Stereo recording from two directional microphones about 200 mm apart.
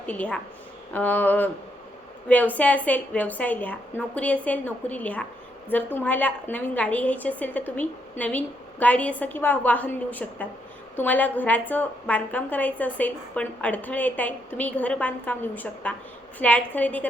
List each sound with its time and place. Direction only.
0.0 s a woman's voice: 5° left (ahead or behind)